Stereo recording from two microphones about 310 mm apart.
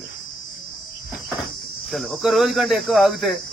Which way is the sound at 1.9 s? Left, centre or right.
Centre.